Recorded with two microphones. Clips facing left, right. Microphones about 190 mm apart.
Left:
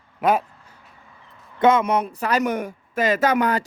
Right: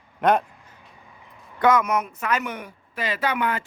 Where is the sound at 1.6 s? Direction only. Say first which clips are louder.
Left 3 dB; 25° left (ahead or behind).